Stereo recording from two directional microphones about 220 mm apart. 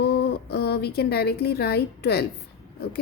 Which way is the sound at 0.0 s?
50° left (ahead or behind).